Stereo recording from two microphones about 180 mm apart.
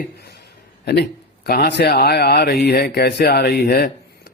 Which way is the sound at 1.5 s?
55° left (ahead or behind).